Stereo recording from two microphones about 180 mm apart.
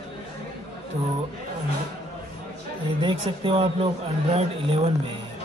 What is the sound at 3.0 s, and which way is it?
Speech, 30° right (ahead or behind).